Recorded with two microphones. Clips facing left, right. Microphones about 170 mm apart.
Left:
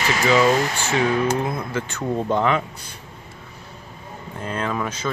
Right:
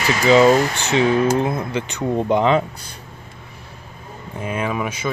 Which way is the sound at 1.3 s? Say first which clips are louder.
Right 4 dB; 25° right (ahead or behind).